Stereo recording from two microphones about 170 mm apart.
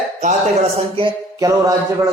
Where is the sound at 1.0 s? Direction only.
20° right (ahead or behind).